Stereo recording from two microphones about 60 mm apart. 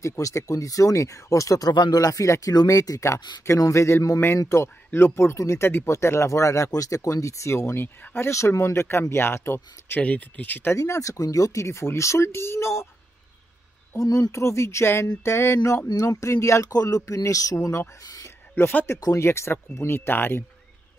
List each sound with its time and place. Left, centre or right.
0.0 s speech: left
3.1 s speech: left
4.5 s speech: left
5.9 s speech: left
7.8 s speech: left
8.3 s speech: left
10.0 s speech: left
10.8 s speech: left
11.6 s speech: left
13.9 s speech: left
14.3 s speech: left
16.7 s speech: left
18.5 s speech: left
19.1 s speech: left